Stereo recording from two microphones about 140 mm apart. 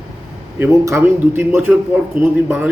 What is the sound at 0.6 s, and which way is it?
A man's voice, 20° right (ahead or behind).